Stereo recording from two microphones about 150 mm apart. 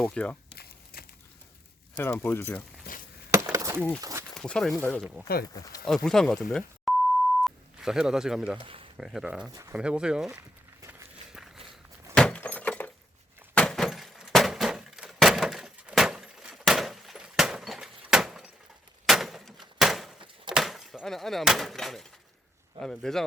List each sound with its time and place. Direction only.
0.0 s speech: 5° left (ahead or behind)
0.5 s crumpling: 90° left
2.0 s speech: 15° left (ahead or behind)
3.5 s a sound: 20° right (ahead or behind)
4.4 s speech: 5° left (ahead or behind)
7.4 s telephone dialing: 5° right (ahead or behind)
8.5 s a sound: 35° right (ahead or behind)
9.0 s speech: 5° right (ahead or behind)
9.5 s speech: 20° right (ahead or behind)
9.7 s speech: 5° right (ahead or behind)
10.8 s walk: 15° right (ahead or behind)
12.1 s a sound: 10° left (ahead or behind)
20.5 s breaking: centre (ahead or behind)
22.8 s a sound: 5° left (ahead or behind)